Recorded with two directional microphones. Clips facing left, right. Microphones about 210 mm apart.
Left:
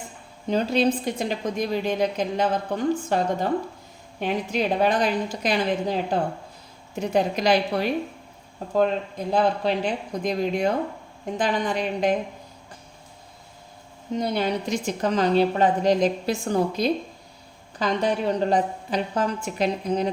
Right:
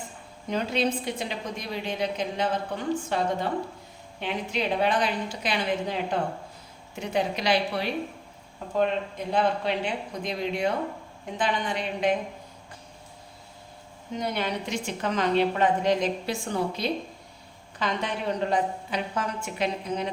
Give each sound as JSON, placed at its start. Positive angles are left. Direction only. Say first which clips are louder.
{"t": 0.4, "sound": "a woman's voice", "louder": "left 5 dB", "side_deg": 35}
{"t": 14.2, "sound": "a woman's voice", "louder": "left 5 dB", "side_deg": 35}